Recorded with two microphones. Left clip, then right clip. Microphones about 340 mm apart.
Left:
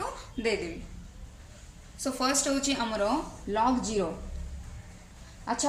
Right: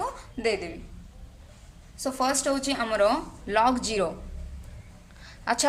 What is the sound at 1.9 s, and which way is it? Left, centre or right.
A woman's voice, centre.